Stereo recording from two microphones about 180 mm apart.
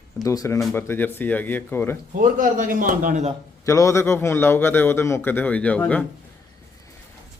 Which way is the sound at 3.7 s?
15° left (ahead or behind).